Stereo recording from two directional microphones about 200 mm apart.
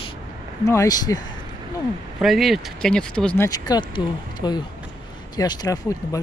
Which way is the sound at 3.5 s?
20° left (ahead or behind).